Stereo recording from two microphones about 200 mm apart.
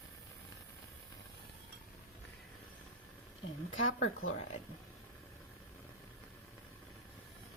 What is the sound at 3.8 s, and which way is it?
Speech, 90° left.